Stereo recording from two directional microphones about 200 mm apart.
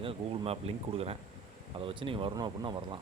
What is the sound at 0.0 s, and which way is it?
Speech, 30° right (ahead or behind).